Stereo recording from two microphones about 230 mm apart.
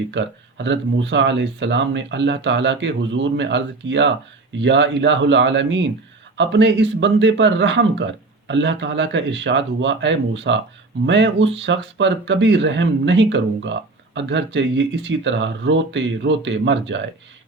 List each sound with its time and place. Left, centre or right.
0.1 s speech: right